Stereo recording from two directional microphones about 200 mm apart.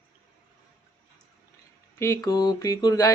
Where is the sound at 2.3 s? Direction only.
20° left (ahead or behind).